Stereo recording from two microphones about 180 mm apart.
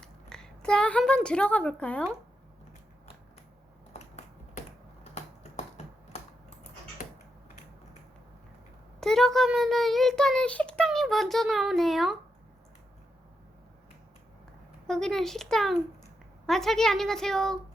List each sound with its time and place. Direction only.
0.0 s a woman's voice: 5° left (ahead or behind)
3.9 s finger snapping: 40° left (ahead or behind)
5.1 s typing: 35° left (ahead or behind)
9.0 s a child's voice: centre (ahead or behind)
14.8 s a child's voice: centre (ahead or behind)